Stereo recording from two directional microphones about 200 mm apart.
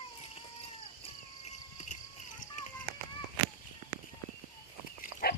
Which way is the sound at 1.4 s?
35° left (ahead or behind).